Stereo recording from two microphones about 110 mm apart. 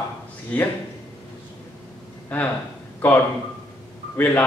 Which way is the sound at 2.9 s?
15° left (ahead or behind).